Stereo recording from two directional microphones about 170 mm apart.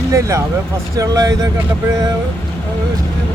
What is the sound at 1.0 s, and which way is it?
Speech, 20° right (ahead or behind).